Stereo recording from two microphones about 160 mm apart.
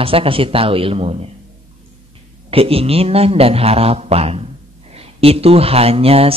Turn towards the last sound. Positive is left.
turn(degrees=-40)  # may be behind; listen again after turning